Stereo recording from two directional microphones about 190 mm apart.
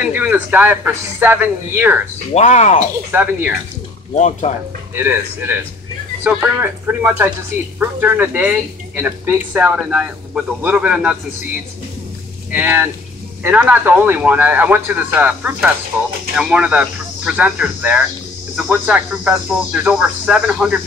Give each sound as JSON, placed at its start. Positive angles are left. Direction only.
{"t": 0.0, "sound": "speech", "side_deg": -5}
{"t": 2.3, "sound": "speech", "side_deg": 35}
{"t": 2.8, "sound": "speech", "side_deg": -10}
{"t": 4.1, "sound": "speech", "side_deg": 40}
{"t": 4.9, "sound": "speech", "side_deg": -10}
{"t": 12.4, "sound": "speech", "side_deg": -10}